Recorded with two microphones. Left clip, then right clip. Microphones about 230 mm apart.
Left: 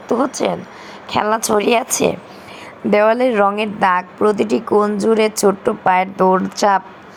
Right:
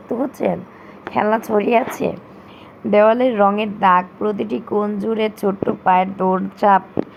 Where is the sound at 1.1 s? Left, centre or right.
Left.